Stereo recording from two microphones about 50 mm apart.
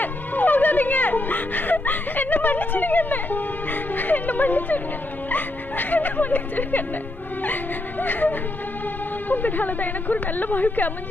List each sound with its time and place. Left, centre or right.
0.0 s a woman's voice: left